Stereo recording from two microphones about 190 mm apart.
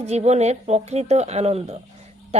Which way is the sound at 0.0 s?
35° right (ahead or behind).